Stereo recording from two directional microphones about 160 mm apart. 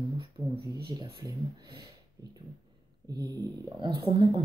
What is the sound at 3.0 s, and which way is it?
Speech, 25° right (ahead or behind).